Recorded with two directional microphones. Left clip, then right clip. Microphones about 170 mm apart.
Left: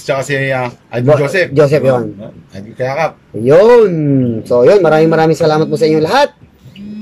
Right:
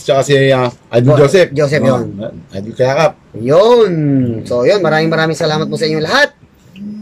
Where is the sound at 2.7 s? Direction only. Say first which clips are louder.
Right 4 dB; 20° right (ahead or behind).